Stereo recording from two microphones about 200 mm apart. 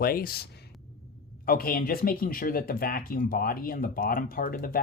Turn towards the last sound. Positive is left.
turn(degrees=45)  # may be behind; listen again after turning